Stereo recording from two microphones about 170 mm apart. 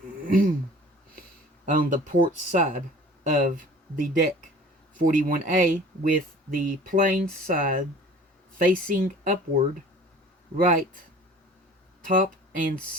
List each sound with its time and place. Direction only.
0.3 s speech: 55° right (ahead or behind)
1.7 s speech: 50° right (ahead or behind)
10.6 s speech: 50° right (ahead or behind)
12.0 s speech: 50° right (ahead or behind)